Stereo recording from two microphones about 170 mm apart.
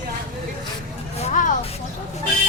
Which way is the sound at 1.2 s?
45° left (ahead or behind).